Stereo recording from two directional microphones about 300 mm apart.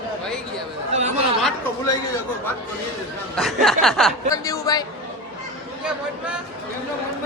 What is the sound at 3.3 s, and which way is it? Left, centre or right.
Speech, centre.